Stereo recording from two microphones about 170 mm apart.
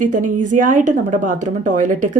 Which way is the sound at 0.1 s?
50° right (ahead or behind).